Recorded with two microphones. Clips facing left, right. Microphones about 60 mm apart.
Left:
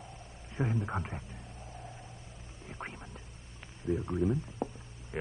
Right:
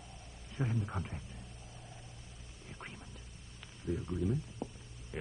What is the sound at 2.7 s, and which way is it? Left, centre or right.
Quack, left.